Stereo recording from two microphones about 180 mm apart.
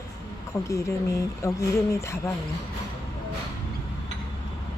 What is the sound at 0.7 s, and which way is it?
Speech, 15° left (ahead or behind).